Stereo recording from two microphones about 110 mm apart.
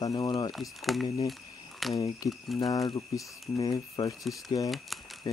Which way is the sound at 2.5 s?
35° left (ahead or behind).